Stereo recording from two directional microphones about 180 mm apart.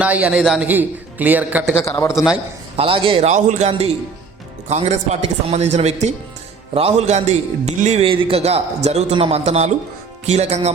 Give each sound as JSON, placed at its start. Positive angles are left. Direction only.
{"t": 0.0, "sound": "a man's voice", "side_deg": -5}
{"t": 1.7, "sound": "a man's voice", "side_deg": 15}
{"t": 2.1, "sound": "a man's voice", "side_deg": -5}
{"t": 2.7, "sound": "a man's voice", "side_deg": -30}